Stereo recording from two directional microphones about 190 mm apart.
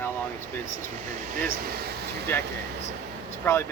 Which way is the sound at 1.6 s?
55° right (ahead or behind).